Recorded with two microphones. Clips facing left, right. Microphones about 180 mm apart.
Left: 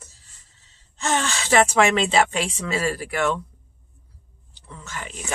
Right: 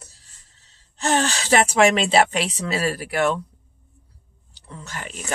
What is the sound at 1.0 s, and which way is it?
Gasp, 35° right (ahead or behind).